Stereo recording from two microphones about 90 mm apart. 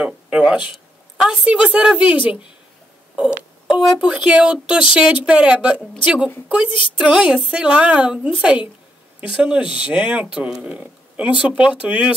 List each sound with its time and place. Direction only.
0.0 s a woman's voice: 10° right (ahead or behind)
3.2 s a sound: 10° right (ahead or behind)
4.0 s speech: 10° right (ahead or behind)